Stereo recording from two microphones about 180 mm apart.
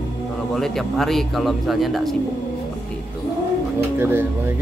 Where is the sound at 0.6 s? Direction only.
Centre (ahead or behind).